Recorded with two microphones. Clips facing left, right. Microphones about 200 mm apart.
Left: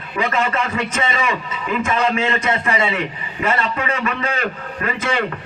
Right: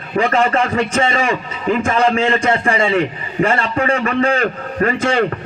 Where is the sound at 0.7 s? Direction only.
30° right (ahead or behind).